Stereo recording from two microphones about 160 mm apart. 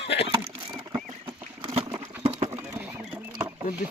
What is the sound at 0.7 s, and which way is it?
Patter, 30° right (ahead or behind).